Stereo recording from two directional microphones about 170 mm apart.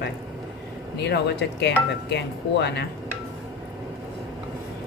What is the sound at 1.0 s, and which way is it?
Speech, 80° left.